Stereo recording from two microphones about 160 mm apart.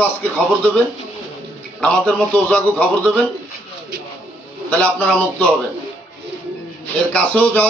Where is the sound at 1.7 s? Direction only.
5° left (ahead or behind).